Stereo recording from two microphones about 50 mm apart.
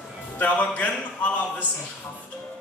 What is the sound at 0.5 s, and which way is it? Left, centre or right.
Speech, left.